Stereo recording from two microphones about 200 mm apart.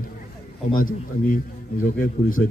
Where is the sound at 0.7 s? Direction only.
45° left (ahead or behind).